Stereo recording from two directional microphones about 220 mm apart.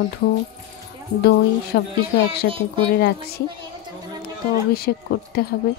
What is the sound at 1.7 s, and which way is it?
Speech, 45° left (ahead or behind).